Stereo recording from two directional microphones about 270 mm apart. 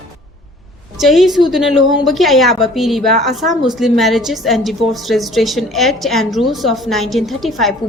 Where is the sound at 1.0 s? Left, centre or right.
Centre.